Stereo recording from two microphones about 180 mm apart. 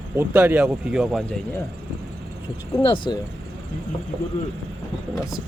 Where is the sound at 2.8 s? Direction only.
25° left (ahead or behind).